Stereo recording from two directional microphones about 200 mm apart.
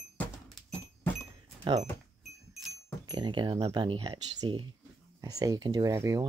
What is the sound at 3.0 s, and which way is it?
Speech, 20° right (ahead or behind).